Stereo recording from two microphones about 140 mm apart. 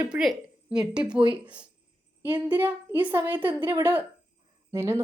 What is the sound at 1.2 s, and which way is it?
Speech, 35° right (ahead or behind).